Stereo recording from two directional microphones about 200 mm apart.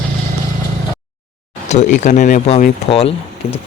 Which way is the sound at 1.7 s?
35° left (ahead or behind).